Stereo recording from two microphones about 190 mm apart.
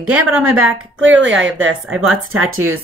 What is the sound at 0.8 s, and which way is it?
Speech, 90° right.